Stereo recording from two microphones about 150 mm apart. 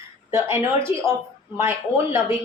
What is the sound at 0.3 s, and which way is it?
Speech, 15° right (ahead or behind).